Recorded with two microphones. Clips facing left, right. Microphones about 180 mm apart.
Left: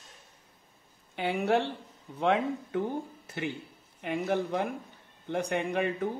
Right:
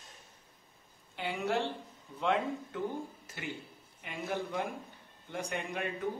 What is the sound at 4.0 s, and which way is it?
Speech, 60° left (ahead or behind).